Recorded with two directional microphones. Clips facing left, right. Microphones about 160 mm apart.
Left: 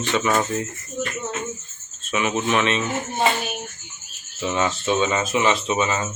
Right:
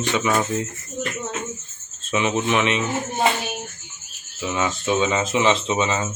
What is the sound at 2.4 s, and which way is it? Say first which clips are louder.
Speech: left 1 dB; 20° right (ahead or behind).